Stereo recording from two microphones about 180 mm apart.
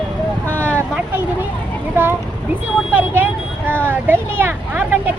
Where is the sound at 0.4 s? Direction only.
10° left (ahead or behind).